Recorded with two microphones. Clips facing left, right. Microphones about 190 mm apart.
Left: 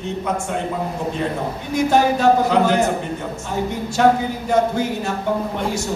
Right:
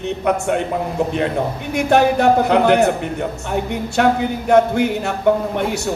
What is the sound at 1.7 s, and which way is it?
A man's voice, 65° right (ahead or behind).